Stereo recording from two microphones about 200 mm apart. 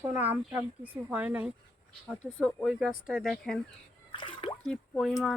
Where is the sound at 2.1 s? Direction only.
5° left (ahead or behind).